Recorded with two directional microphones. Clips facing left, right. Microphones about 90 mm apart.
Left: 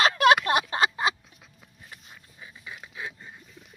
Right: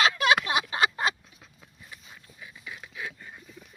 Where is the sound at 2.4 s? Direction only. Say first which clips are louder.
Even; 25° left (ahead or behind).